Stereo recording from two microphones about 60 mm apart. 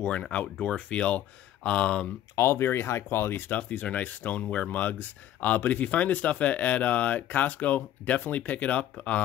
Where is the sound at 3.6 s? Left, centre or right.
Left.